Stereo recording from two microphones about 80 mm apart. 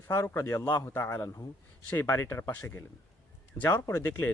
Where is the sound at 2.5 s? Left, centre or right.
Left.